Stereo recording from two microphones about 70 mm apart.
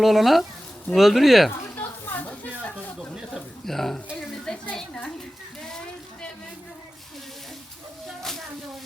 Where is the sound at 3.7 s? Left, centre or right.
Centre.